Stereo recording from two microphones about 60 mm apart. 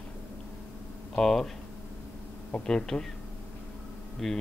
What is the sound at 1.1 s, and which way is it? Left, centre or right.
Speech, centre.